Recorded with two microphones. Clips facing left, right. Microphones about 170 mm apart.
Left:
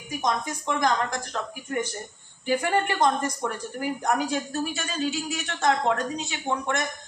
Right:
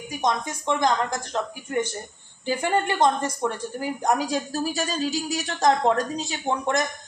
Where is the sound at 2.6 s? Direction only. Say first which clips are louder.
Right 3 dB; 30° right (ahead or behind).